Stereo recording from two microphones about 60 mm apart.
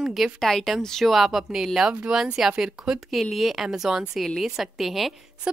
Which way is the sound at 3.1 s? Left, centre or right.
Centre.